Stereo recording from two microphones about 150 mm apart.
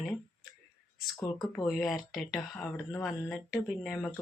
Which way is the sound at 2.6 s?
20° left (ahead or behind).